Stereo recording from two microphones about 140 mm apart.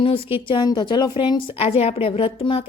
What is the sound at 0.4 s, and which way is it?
A woman's voice, 35° left (ahead or behind).